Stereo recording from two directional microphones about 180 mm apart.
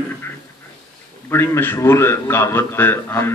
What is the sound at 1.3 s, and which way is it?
A man's voice, 15° left (ahead or behind).